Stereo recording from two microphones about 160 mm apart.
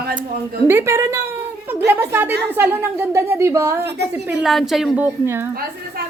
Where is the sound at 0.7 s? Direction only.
15° right (ahead or behind).